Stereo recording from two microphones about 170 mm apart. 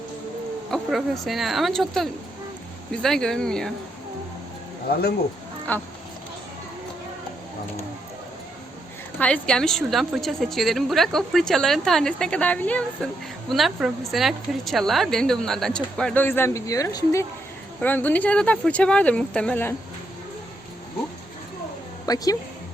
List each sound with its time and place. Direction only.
0.7 s a woman's voice: centre (ahead or behind)
5.7 s speech: 10° left (ahead or behind)
9.1 s a woman's voice: 5° left (ahead or behind)
22.0 s speech: 20° left (ahead or behind)